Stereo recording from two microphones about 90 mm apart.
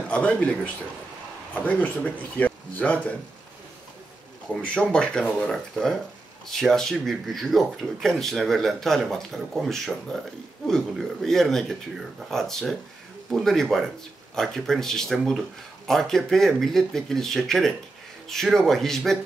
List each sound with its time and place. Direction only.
0.1 s speech: 15° left (ahead or behind)
1.7 s speech: 20° left (ahead or behind)
4.6 s speech: 10° left (ahead or behind)